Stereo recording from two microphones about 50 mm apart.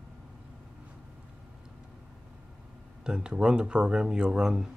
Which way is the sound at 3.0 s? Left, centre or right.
Centre.